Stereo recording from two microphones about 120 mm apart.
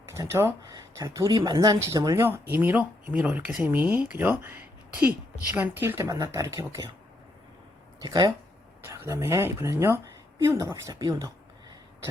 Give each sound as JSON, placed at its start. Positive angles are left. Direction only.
{"t": 0.1, "sound": "speech", "side_deg": -20}
{"t": 2.2, "sound": "speech", "side_deg": -15}
{"t": 8.0, "sound": "speech", "side_deg": -35}
{"t": 8.9, "sound": "speech", "side_deg": -25}